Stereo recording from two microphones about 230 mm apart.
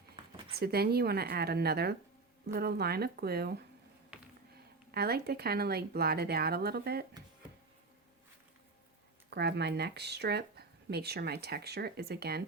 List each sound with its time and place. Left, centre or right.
0.6 s speech: right
4.9 s speech: right
9.3 s speech: right